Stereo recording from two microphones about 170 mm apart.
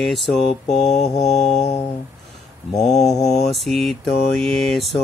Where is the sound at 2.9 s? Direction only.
40° left (ahead or behind).